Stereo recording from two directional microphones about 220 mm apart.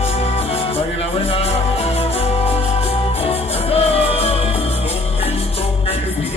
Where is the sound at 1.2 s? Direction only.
25° left (ahead or behind).